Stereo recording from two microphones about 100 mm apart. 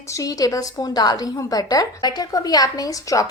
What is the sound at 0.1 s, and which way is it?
A woman's voice, 35° left (ahead or behind).